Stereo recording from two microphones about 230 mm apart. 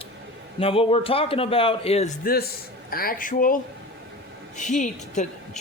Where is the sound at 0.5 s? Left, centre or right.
Left.